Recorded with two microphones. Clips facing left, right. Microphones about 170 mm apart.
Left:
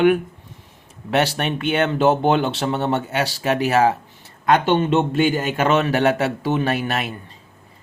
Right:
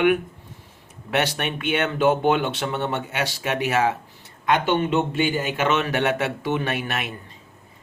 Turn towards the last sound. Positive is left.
turn(degrees=35)  # may be behind; listen again after turning